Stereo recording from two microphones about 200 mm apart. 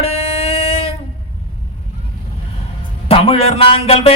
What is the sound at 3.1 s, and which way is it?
A man's voice, 30° left (ahead or behind).